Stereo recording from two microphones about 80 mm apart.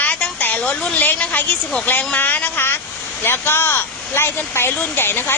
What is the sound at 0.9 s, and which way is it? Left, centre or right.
Speech, left.